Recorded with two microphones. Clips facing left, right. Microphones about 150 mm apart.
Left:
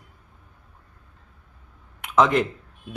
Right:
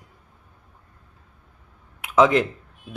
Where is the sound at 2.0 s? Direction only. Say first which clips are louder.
Right 2 dB; 5° right (ahead or behind).